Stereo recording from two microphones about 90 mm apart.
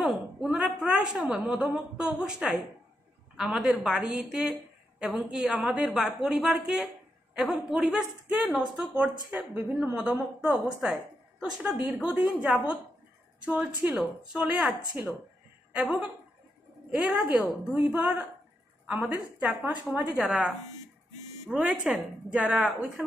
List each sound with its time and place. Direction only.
0.0 s a sound: 5° right (ahead or behind)
0.6 s a woman's voice: 10° right (ahead or behind)
17.6 s a woman's voice: 20° right (ahead or behind)
20.2 s a woman's voice: 5° right (ahead or behind)